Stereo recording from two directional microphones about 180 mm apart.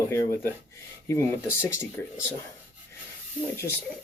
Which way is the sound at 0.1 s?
15° left (ahead or behind).